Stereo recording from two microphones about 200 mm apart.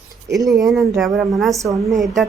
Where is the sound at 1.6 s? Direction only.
15° right (ahead or behind).